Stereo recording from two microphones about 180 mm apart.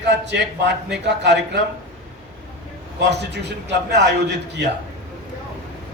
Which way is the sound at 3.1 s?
70° right (ahead or behind).